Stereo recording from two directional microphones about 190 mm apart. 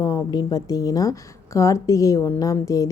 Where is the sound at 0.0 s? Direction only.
20° left (ahead or behind).